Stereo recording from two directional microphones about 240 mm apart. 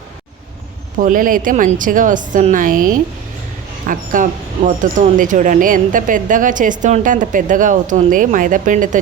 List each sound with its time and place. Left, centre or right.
0.9 s speech: right